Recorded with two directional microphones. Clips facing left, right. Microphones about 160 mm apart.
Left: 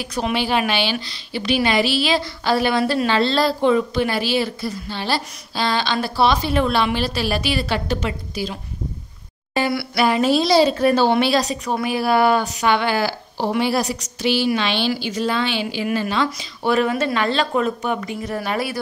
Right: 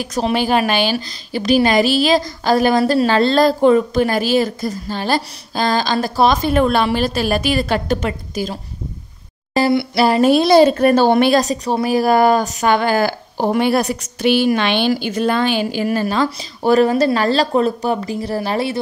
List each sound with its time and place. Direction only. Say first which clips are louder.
0.0 s speech: right 4 dB; 45° right (ahead or behind)
9.7 s a sound: right 7 dB; 25° right (ahead or behind)
10.0 s speech: right 4 dB; 40° right (ahead or behind)
10.3 s speech: right 6 dB; 55° right (ahead or behind); by 18.8 s 30° right (ahead or behind)